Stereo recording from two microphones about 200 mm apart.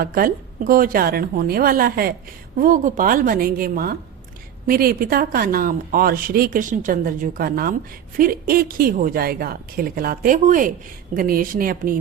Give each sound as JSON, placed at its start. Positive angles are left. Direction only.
{"t": 0.0, "sound": "speech", "side_deg": -45}